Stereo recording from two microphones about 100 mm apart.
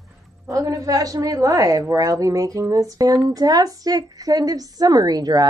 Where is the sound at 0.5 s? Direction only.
35° right (ahead or behind).